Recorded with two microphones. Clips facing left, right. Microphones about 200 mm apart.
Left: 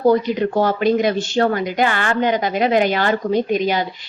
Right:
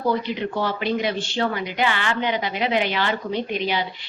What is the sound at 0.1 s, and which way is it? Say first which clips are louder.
Speech: left 7 dB; 45° left (ahead or behind).